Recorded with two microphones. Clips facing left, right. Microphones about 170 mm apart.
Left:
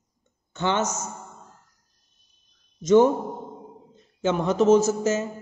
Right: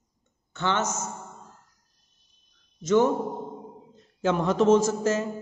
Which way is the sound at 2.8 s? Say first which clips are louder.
Left 4 dB; 15° left (ahead or behind).